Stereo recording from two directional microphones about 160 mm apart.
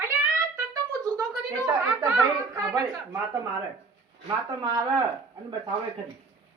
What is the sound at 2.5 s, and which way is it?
Speech, 20° right (ahead or behind).